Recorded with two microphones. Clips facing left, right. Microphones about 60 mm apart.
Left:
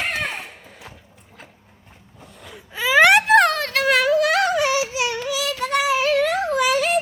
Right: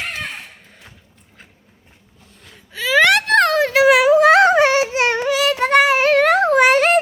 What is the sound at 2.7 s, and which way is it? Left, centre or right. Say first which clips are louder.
Gasp: even; centre.